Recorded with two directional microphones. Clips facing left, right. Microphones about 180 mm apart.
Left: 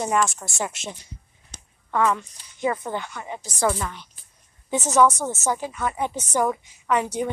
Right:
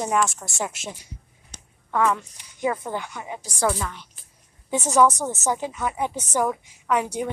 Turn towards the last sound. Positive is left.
turn(degrees=-5)  # may be behind; listen again after turning